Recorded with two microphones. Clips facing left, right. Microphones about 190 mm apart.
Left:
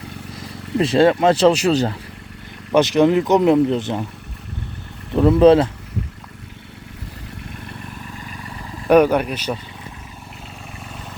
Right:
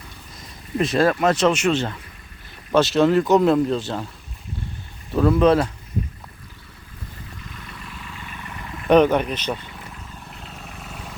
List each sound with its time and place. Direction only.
0.8 s speech: 30° left (ahead or behind)
2.7 s speech: 15° left (ahead or behind)
5.1 s speech: 25° left (ahead or behind)
7.5 s vehicle: 40° left (ahead or behind)
8.9 s speech: 10° left (ahead or behind)
10.8 s vehicle: centre (ahead or behind)